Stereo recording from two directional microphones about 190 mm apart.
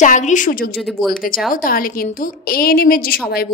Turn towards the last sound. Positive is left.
turn(degrees=50)  # may be behind; listen again after turning